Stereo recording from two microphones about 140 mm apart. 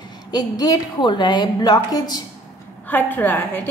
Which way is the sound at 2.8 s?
15° left (ahead or behind).